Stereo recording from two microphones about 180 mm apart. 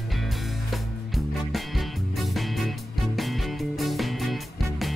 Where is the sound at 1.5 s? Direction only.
Centre (ahead or behind).